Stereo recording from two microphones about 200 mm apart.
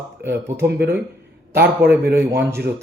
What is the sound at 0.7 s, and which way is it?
Speech, 55° right (ahead or behind).